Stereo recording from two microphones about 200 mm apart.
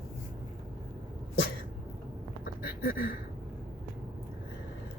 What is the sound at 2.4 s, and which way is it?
Duck, 50° left (ahead or behind).